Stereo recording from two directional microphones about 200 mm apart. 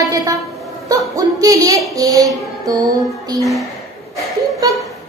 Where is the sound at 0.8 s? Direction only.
15° right (ahead or behind).